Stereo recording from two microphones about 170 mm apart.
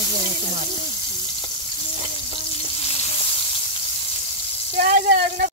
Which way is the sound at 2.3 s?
35° left (ahead or behind).